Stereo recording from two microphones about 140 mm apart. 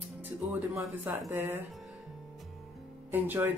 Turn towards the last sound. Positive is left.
turn(degrees=-15)  # may be behind; listen again after turning